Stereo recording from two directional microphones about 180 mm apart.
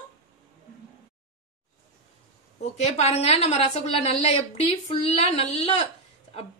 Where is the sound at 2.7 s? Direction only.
35° left (ahead or behind).